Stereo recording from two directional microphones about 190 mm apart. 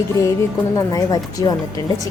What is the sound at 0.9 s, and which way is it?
Speech, 20° left (ahead or behind).